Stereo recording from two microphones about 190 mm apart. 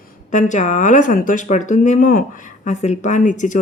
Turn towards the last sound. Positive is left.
turn(degrees=40)  # may be behind; listen again after turning